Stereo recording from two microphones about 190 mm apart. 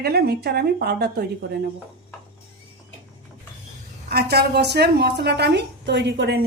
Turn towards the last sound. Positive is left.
turn(degrees=-70)  # may be behind; listen again after turning